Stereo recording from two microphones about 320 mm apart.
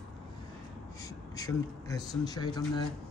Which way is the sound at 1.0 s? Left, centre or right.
Centre.